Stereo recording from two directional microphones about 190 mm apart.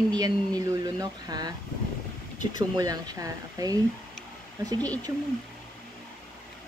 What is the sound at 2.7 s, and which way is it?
Speech, 20° right (ahead or behind).